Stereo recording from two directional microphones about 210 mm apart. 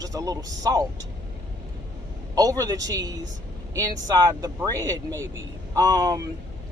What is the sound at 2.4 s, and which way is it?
Speech, 15° right (ahead or behind).